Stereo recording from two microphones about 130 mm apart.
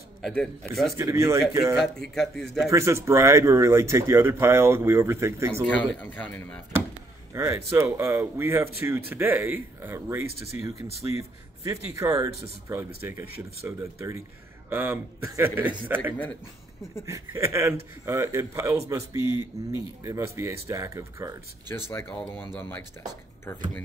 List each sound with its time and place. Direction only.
0.2 s speech: 10° left (ahead or behind)
0.9 s speech: 20° right (ahead or behind)
2.1 s speech: 5° left (ahead or behind)
2.7 s speech: 20° right (ahead or behind)
5.7 s speech: 10° left (ahead or behind)
7.3 s speech: 20° right (ahead or behind)
22.1 s speech: 5° left (ahead or behind)